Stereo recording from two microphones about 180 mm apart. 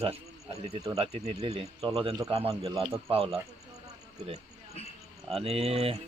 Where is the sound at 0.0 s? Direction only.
35° right (ahead or behind).